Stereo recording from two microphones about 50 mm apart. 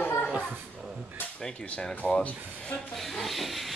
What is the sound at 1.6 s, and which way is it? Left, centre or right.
Speech, left.